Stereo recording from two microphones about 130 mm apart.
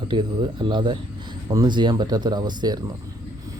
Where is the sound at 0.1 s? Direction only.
40° right (ahead or behind).